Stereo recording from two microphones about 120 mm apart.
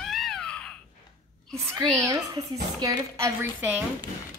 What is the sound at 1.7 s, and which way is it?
A child's voice, 30° right (ahead or behind).